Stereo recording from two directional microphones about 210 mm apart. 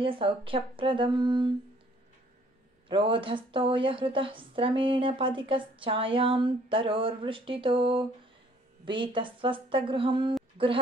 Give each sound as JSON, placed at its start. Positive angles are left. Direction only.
{"t": 0.0, "sound": "a woman's voice", "side_deg": -25}
{"t": 2.9, "sound": "a woman's voice", "side_deg": -25}